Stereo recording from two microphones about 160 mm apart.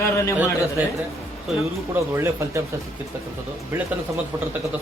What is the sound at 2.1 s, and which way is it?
Speech, 15° right (ahead or behind).